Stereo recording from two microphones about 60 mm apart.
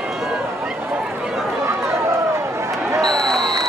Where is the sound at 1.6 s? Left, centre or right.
Right.